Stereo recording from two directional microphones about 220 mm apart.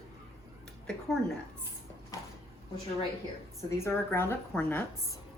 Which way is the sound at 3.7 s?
10° left (ahead or behind).